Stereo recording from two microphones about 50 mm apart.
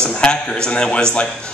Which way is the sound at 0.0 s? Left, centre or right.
Centre.